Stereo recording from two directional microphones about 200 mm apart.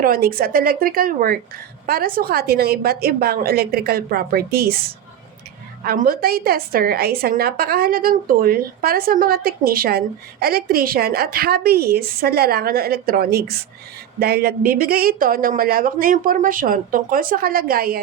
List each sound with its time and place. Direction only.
0.0 s a woman's voice: 45° right (ahead or behind)
5.8 s a woman's voice: 50° right (ahead or behind)